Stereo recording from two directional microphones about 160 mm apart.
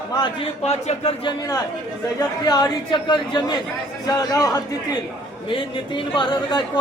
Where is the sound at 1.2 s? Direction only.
20° left (ahead or behind).